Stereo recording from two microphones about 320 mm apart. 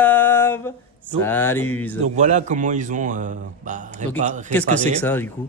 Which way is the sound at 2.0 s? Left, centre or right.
Right.